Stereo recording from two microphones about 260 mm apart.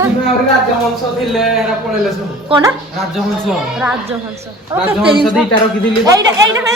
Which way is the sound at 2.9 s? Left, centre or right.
Centre.